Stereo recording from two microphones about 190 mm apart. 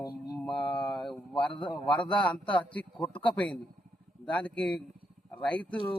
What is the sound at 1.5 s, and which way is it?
Speech, 25° left (ahead or behind).